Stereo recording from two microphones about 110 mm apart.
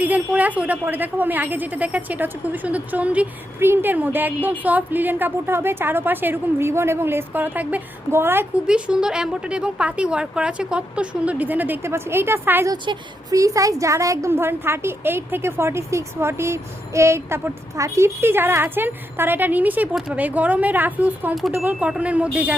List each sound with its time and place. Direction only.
0.0 s a woman's voice: 15° right (ahead or behind)
8.6 s speech: 10° right (ahead or behind)
12.7 s speech: 45° right (ahead or behind)
13.3 s a woman's voice: 30° right (ahead or behind); by 21.3 s 15° right (ahead or behind)
21.3 s speech: centre (ahead or behind)
21.6 s speech: 15° right (ahead or behind)